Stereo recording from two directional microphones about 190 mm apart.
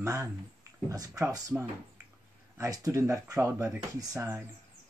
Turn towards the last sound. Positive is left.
turn(degrees=-15)  # may be behind; listen again after turning